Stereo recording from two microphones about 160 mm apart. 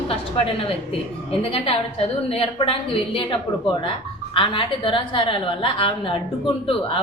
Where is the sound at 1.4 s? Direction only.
35° left (ahead or behind).